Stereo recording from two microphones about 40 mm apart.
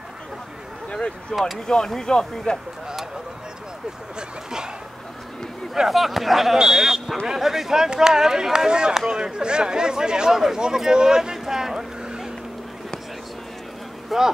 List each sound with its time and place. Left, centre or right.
1.3 s speech: centre
5.9 s speech: centre
6.6 s speech: centre
10.6 s a sound: centre
14.1 s speech: centre